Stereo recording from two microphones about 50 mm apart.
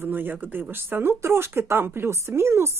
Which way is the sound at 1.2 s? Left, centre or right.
Right.